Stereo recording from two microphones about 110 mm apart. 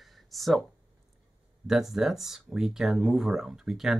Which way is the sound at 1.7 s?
5° right (ahead or behind).